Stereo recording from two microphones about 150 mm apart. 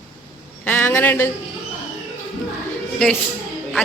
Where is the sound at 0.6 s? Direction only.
15° left (ahead or behind).